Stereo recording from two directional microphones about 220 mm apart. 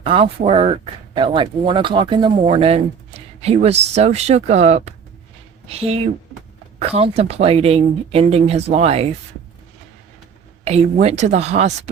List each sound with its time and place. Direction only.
0.0 s speech: 25° right (ahead or behind)
10.6 s speech: 30° right (ahead or behind)